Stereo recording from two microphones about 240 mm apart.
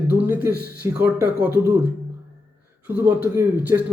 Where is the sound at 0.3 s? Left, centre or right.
Centre.